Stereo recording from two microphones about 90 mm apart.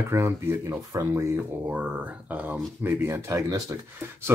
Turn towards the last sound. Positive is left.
turn(degrees=-25)  # may be behind; listen again after turning